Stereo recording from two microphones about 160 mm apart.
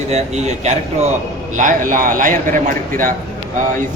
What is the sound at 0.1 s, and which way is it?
A man's voice, 45° right (ahead or behind).